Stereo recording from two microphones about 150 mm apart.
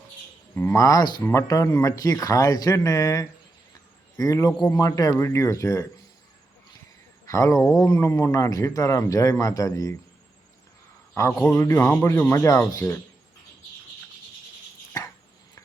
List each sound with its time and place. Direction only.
0.5 s a man's voice: 15° left (ahead or behind)
7.3 s a man's voice: 20° left (ahead or behind)
11.1 s a man's voice: 15° left (ahead or behind)